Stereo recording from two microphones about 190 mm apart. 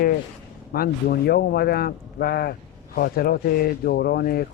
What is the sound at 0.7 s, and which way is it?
Speech, 50° left (ahead or behind).